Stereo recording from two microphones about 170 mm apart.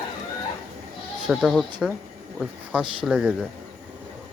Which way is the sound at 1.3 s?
Centre (ahead or behind).